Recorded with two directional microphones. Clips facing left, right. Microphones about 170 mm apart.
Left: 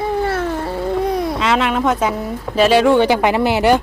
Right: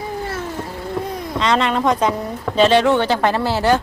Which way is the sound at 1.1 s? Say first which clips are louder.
Left 8 dB; 75° left (ahead or behind).